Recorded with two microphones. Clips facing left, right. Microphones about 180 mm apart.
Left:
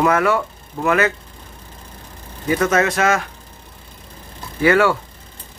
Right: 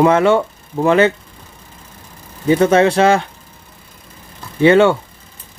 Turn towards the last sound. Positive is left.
turn(degrees=-25)  # may be behind; listen again after turning